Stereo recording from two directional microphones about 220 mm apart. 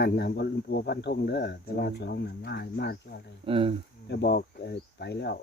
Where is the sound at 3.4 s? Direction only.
25° right (ahead or behind).